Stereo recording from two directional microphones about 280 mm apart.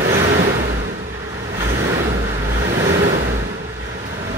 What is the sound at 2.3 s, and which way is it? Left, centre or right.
Vehicle, right.